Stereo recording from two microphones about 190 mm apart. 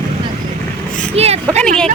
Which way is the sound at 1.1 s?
35° right (ahead or behind).